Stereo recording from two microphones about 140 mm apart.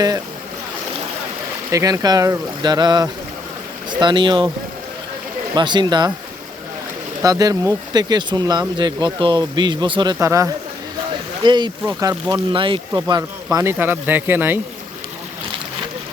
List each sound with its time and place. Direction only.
1.7 s speech: 25° right (ahead or behind)
5.5 s speech: 35° right (ahead or behind)
7.2 s speech: 25° right (ahead or behind)
10.2 s speech: 20° right (ahead or behind)
11.4 s speech: 30° right (ahead or behind)
12.5 s speech: 35° right (ahead or behind); by 14.6 s 15° right (ahead or behind)